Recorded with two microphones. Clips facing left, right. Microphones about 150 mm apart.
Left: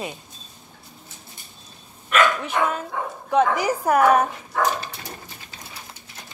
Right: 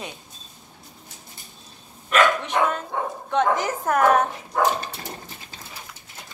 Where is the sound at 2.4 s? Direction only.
5° left (ahead or behind).